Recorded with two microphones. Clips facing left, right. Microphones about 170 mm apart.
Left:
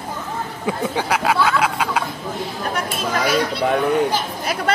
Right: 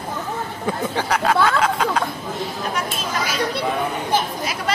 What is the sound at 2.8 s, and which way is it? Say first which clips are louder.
Speech: left 5 dB; 60° left (ahead or behind).